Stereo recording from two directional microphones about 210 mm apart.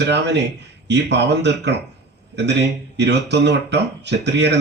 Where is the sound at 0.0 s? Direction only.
55° right (ahead or behind).